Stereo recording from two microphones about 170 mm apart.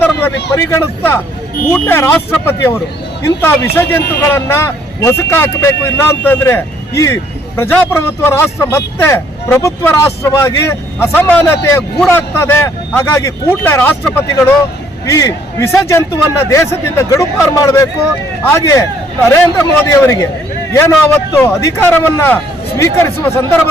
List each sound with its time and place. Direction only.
0.0 s vehicle: 15° left (ahead or behind)
0.5 s speech: 15° left (ahead or behind)
21.3 s speech: 15° left (ahead or behind)